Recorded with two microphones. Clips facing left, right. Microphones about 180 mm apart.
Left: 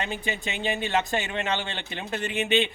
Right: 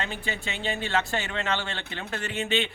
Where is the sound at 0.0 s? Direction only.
15° left (ahead or behind).